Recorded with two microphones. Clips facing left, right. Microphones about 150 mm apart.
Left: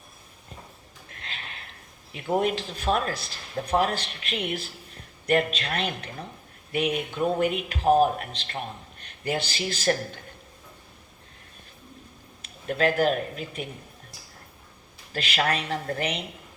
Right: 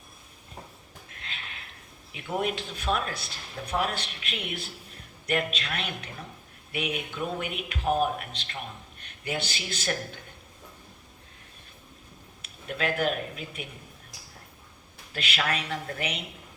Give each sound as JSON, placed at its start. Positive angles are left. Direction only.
{"t": 1.2, "sound": "a sound", "side_deg": 40}
{"t": 2.1, "sound": "speech", "side_deg": 40}
{"t": 12.6, "sound": "speech", "side_deg": 40}
{"t": 15.1, "sound": "speech", "side_deg": 40}